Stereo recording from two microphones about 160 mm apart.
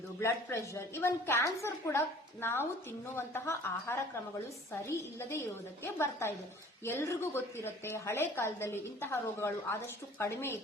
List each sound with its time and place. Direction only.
0.2 s a woman's voice: 15° left (ahead or behind)